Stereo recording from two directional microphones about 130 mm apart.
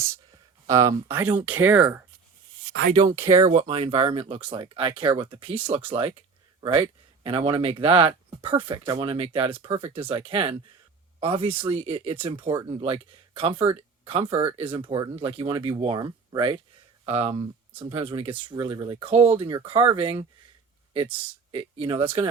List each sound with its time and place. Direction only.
0.7 s speech: 25° right (ahead or behind)
2.9 s speech: 30° right (ahead or behind)
3.5 s speech: 55° right (ahead or behind)
21.5 s speech: 40° right (ahead or behind)